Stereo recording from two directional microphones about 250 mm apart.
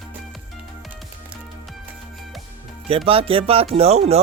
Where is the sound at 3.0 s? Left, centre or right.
Right.